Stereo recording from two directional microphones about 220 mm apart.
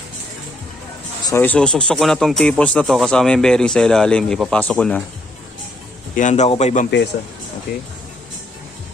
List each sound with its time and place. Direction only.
1.2 s speech: 10° left (ahead or behind)
6.1 s a man's voice: 35° left (ahead or behind)